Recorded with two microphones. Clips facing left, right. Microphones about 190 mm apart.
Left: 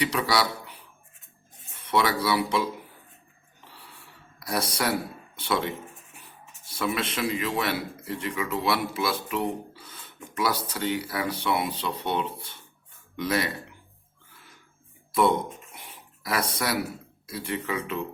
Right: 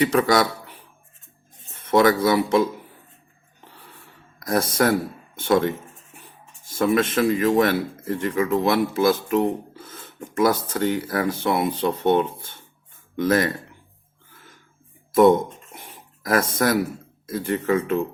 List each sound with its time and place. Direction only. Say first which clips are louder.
0.0 s speech: right 7 dB; 50° right (ahead or behind)
1.9 s speech: right 7 dB; 45° right (ahead or behind)
4.4 s speech: right 8 dB; 45° right (ahead or behind)
15.1 s speech: right 8 dB; 45° right (ahead or behind)
15.7 s a sound: right 4 dB; 45° right (ahead or behind)
16.6 s speech: right 8 dB; 45° right (ahead or behind)